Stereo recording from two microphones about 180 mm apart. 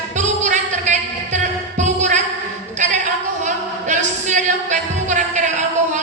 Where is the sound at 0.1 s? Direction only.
40° right (ahead or behind).